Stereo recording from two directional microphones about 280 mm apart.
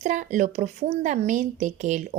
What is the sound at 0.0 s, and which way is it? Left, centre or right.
Speech, right.